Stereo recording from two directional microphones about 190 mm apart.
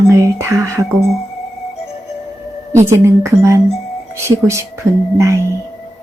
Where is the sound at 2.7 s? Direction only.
15° right (ahead or behind).